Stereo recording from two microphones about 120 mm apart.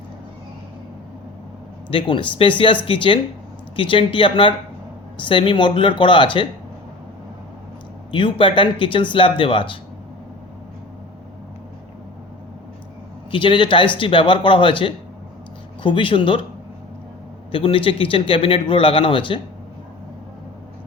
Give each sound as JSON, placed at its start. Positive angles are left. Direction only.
{"t": 1.9, "sound": "speech", "side_deg": 45}
{"t": 8.1, "sound": "speech", "side_deg": 45}
{"t": 13.3, "sound": "speech", "side_deg": 45}
{"t": 17.5, "sound": "speech", "side_deg": 50}